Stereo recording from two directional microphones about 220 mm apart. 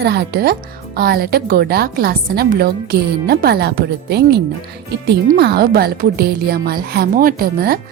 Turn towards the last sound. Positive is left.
turn(degrees=-45)  # may be behind; listen again after turning